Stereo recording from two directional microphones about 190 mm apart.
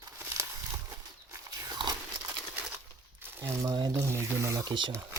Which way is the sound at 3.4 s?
15° right (ahead or behind).